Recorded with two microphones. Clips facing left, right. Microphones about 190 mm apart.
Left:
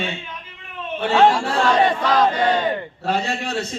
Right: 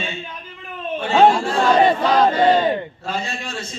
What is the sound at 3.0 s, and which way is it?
Speech, 65° left (ahead or behind).